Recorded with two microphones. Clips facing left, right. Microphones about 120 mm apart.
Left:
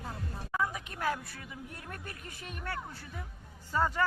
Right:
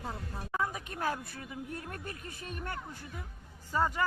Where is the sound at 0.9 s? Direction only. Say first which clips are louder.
Even; 40° right (ahead or behind).